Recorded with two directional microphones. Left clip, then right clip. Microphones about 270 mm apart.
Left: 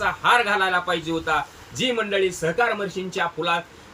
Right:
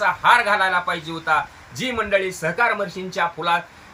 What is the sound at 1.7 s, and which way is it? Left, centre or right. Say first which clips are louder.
Speech: right 1 dB; centre.